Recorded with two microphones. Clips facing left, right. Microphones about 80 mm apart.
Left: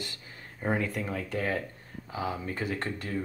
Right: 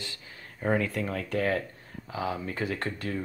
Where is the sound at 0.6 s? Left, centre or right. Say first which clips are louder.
Right 3 dB; centre.